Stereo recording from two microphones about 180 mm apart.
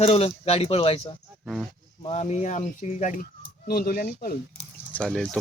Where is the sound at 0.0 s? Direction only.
35° left (ahead or behind).